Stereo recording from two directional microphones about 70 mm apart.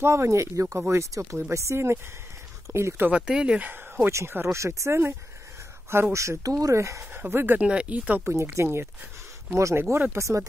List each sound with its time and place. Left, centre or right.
0.0 s speech: right
3.1 s speech: centre
4.1 s speech: right
6.1 s speech: right
7.2 s speech: right
7.6 s speech: centre
8.3 s speech: right
9.8 s speech: right
10.1 s speech: right